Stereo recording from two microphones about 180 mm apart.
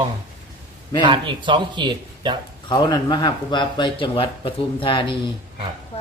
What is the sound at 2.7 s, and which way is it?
Speech, 25° left (ahead or behind).